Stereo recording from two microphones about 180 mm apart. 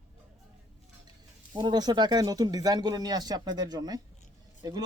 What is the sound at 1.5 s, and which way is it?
Speech, 25° right (ahead or behind).